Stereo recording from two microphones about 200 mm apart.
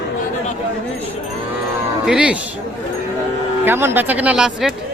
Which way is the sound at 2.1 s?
5° right (ahead or behind).